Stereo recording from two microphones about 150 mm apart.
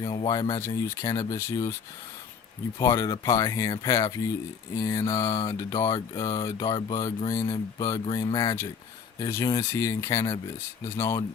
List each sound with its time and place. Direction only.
0.0 s speech: 30° left (ahead or behind)
0.6 s mantra: 20° left (ahead or behind)
2.7 s mantra: 20° left (ahead or behind)
8.0 s mantra: 35° left (ahead or behind)